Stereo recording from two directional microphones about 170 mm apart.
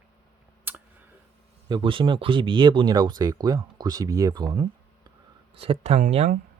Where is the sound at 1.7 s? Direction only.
30° right (ahead or behind).